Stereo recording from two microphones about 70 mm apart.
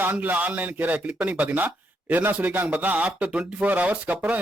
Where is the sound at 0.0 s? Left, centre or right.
Right.